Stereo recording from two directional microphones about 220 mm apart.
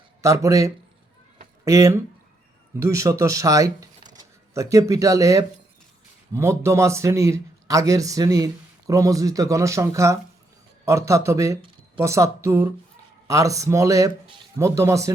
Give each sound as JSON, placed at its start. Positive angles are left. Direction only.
{"t": 0.2, "sound": "speech", "side_deg": -15}